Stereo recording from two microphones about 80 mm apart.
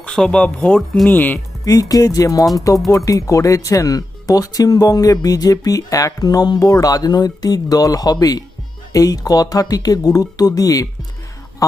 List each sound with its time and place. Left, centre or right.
0.2 s speech: centre
1.6 s speech: left